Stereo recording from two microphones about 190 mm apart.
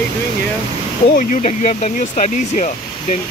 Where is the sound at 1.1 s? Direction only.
40° left (ahead or behind).